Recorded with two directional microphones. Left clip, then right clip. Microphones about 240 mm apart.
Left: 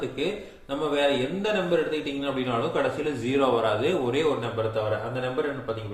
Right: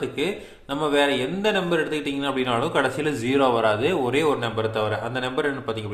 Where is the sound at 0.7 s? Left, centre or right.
Right.